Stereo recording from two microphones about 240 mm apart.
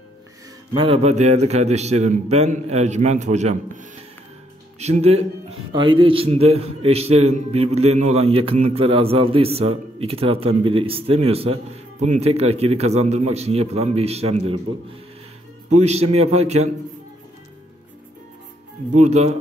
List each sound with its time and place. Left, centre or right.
0.7 s a man's voice: right
15.7 s a man's voice: right
18.9 s a man's voice: right